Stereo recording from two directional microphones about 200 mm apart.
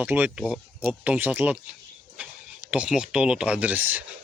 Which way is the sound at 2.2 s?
5° right (ahead or behind).